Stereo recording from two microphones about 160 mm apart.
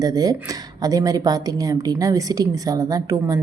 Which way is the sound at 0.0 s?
25° right (ahead or behind).